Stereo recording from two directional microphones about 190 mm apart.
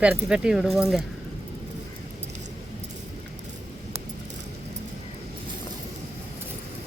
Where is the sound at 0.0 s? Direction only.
5° right (ahead or behind).